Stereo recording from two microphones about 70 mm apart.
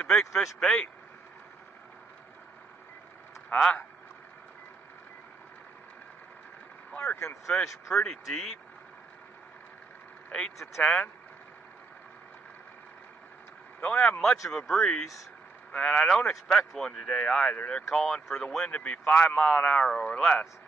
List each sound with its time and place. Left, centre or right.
0.0 s speech: centre
3.5 s speech: centre
6.9 s speech: centre
7.2 s speech: left
7.9 s speech: centre
10.8 s speech: centre
13.7 s speech: centre